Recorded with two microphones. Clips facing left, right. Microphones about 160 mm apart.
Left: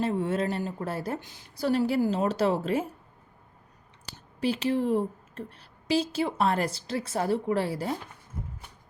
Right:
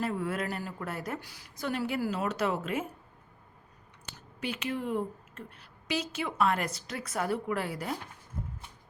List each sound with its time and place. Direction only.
0.0 s a woman's voice: 25° left (ahead or behind)
4.0 s speech: 30° left (ahead or behind)